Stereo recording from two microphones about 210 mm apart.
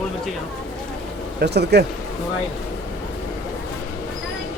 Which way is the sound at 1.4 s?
50° right (ahead or behind).